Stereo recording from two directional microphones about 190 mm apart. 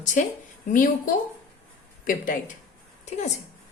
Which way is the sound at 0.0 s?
40° left (ahead or behind).